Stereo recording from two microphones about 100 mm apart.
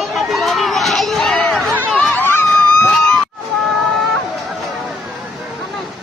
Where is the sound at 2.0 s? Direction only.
20° left (ahead or behind).